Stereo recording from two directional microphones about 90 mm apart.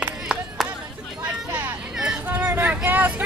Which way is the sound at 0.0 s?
10° right (ahead or behind).